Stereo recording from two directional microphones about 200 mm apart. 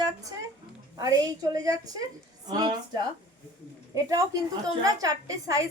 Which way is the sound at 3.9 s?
15° right (ahead or behind).